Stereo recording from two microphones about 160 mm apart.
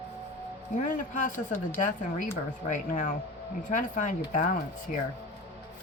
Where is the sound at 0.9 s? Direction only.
55° left (ahead or behind).